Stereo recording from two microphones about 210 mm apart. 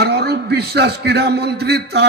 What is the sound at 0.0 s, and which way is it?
A man's voice, 50° right (ahead or behind).